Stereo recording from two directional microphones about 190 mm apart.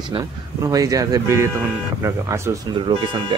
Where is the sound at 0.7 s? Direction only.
20° right (ahead or behind).